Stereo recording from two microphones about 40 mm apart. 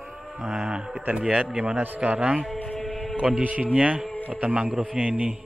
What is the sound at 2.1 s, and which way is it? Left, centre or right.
Speech, right.